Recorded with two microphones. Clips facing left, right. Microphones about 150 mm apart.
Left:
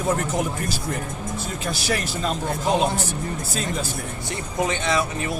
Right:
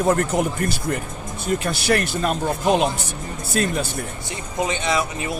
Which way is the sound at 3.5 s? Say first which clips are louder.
Right 8 dB; 65° right (ahead or behind).